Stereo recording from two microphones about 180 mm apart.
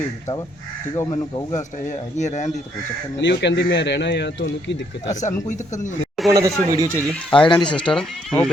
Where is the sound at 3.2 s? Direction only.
70° left (ahead or behind).